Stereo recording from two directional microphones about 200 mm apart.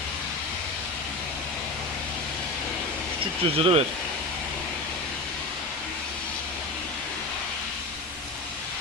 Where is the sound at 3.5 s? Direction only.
30° right (ahead or behind).